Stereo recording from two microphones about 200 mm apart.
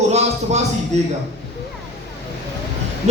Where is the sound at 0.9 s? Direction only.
35° right (ahead or behind).